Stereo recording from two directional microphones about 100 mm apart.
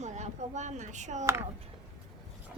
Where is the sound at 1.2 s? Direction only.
30° right (ahead or behind).